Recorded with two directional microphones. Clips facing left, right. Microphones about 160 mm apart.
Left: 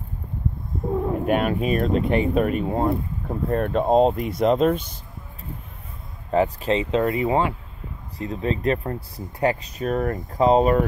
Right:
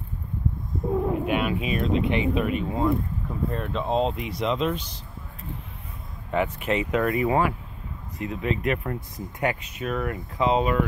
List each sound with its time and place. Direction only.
1.2 s speech: 45° left (ahead or behind)
6.3 s speech: 35° left (ahead or behind)